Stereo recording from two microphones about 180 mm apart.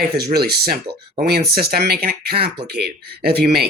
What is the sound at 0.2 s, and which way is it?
Speech, 60° right (ahead or behind).